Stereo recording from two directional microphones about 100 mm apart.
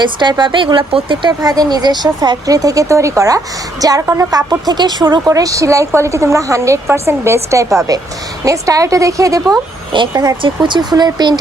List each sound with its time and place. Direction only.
0.0 s a woman's voice: 50° right (ahead or behind); by 9.4 s 35° right (ahead or behind)
9.9 s a woman's voice: 50° right (ahead or behind)